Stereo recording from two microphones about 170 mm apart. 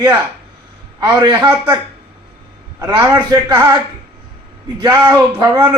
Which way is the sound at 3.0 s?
15° right (ahead or behind).